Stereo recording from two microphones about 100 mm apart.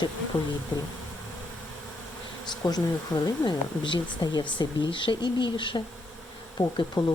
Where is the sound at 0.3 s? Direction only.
55° left (ahead or behind).